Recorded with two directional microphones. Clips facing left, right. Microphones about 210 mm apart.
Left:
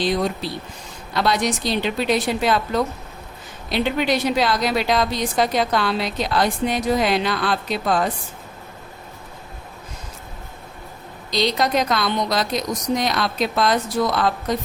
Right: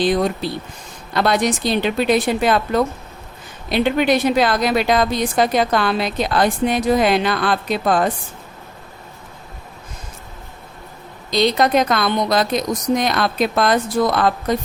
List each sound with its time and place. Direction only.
1.1 s a woman's voice: 50° right (ahead or behind)
11.3 s a woman's voice: 55° right (ahead or behind)